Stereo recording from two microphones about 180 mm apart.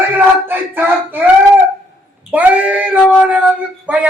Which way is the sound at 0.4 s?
10° right (ahead or behind).